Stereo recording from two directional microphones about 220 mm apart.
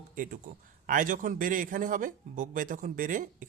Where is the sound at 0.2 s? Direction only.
35° right (ahead or behind).